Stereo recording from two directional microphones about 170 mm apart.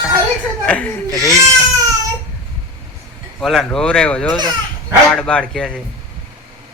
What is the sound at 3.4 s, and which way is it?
Speech, 5° left (ahead or behind).